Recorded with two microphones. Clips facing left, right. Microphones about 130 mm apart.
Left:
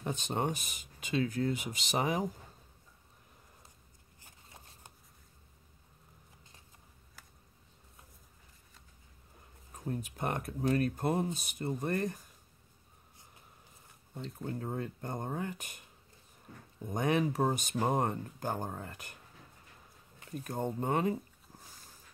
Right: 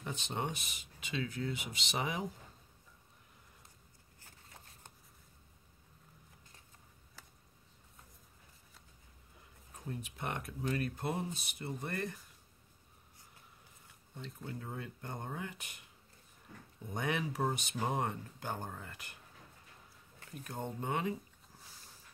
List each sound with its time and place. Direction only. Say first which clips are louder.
0.0 s speech: left 5 dB; 45° left (ahead or behind)
4.2 s a sound: left 1 dB; 15° left (ahead or behind)
9.8 s speech: left 5 dB; 45° left (ahead or behind)
14.1 s speech: left 6 dB; 40° left (ahead or behind)
16.8 s speech: left 6 dB; 40° left (ahead or behind)
20.4 s speech: left 5 dB; 40° left (ahead or behind)